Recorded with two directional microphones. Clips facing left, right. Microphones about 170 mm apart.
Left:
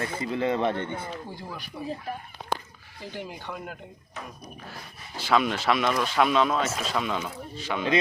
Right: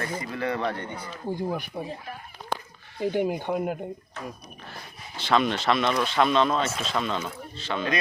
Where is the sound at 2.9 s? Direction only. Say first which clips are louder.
Right 12 dB; 55° right (ahead or behind).